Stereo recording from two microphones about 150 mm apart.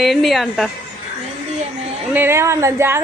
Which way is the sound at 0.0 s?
Centre (ahead or behind).